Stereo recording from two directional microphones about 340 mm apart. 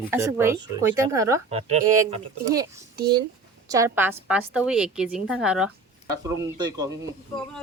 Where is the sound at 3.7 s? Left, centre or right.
Centre.